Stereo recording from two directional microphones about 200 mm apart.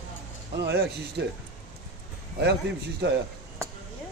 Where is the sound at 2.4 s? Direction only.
55° right (ahead or behind).